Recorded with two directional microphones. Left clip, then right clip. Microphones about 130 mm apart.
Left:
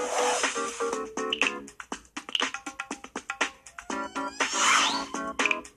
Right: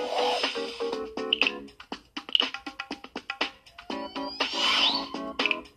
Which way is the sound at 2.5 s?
Centre (ahead or behind).